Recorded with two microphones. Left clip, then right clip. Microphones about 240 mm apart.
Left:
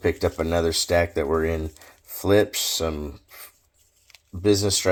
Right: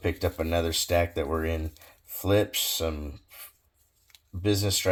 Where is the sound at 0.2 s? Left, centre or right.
Left.